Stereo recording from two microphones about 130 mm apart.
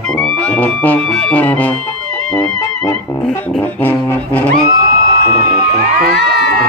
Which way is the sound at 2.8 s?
25° left (ahead or behind).